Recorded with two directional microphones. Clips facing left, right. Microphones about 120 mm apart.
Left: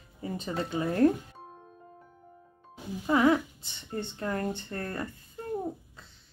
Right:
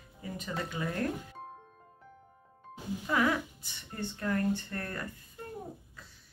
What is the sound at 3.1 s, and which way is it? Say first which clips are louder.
Speech: left 6 dB; 25° left (ahead or behind).